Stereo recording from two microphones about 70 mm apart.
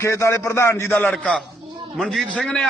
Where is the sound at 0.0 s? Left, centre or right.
Left.